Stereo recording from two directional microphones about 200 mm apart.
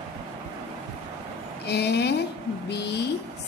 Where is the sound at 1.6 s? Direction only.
55° left (ahead or behind).